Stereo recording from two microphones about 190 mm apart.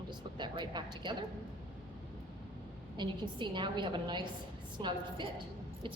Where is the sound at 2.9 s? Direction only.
25° right (ahead or behind).